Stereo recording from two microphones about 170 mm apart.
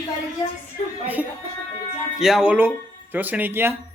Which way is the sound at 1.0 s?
10° right (ahead or behind).